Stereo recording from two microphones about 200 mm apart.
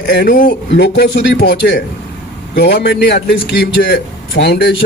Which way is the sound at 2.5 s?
55° left (ahead or behind).